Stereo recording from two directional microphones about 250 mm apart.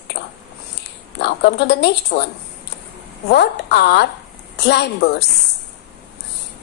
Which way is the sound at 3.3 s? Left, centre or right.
Left.